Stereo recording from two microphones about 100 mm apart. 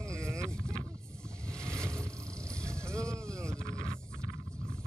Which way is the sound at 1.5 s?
10° left (ahead or behind).